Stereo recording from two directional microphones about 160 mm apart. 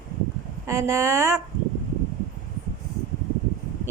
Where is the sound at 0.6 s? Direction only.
20° right (ahead or behind).